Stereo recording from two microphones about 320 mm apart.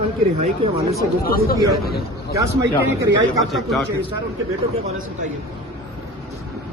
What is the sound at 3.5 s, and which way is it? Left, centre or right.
Speech, centre.